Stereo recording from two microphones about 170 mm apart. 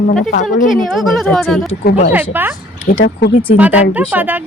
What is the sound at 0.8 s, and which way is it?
Speech, centre (ahead or behind).